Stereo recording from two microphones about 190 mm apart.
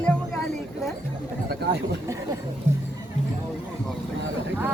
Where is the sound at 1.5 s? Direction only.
60° right (ahead or behind).